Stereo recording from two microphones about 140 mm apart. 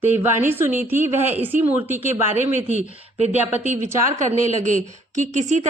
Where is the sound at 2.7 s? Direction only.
55° right (ahead or behind).